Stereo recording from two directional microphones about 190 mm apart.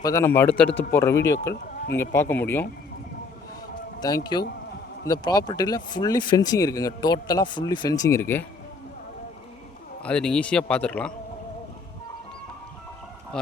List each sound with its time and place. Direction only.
0.0 s speech: 15° left (ahead or behind)
4.0 s speech: 20° left (ahead or behind)
10.0 s speech: 5° left (ahead or behind)
13.3 s speech: 5° left (ahead or behind)